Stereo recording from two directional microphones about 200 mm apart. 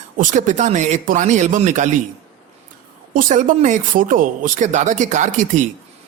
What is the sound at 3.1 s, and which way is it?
Speech, 40° right (ahead or behind).